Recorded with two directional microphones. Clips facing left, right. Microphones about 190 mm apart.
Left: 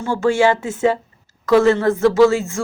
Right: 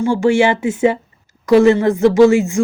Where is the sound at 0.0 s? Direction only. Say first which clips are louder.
Right 3 dB; 15° right (ahead or behind).